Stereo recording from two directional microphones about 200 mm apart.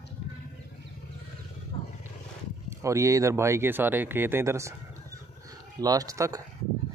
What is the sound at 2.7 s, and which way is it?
Speech, 15° right (ahead or behind).